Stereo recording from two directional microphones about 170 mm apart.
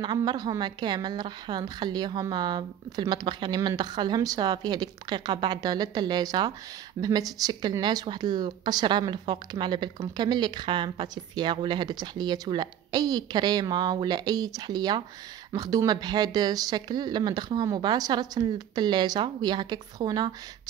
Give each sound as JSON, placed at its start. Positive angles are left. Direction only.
{"t": 0.0, "sound": "speech", "side_deg": -25}